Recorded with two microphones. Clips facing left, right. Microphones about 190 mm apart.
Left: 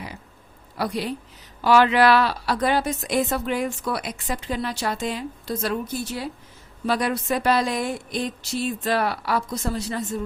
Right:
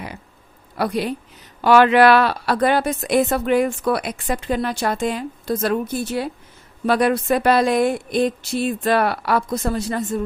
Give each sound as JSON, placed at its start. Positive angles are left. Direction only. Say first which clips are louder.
{"t": 0.8, "sound": "a woman's voice", "louder": "right 4 dB", "side_deg": -60}